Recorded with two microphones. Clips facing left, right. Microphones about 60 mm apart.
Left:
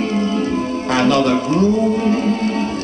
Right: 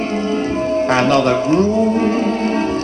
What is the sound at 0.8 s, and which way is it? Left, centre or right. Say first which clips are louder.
Music: even; right.